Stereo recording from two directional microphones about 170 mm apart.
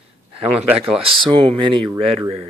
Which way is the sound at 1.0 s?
30° right (ahead or behind).